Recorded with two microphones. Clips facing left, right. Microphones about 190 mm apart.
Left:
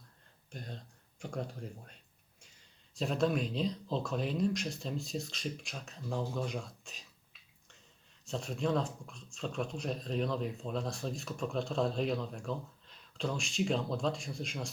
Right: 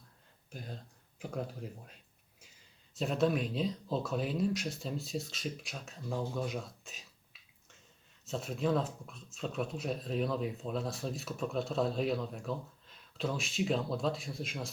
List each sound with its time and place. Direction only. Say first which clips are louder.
0.5 s speech: even; 5° right (ahead or behind)
8.2 s speech: right 1 dB; centre (ahead or behind)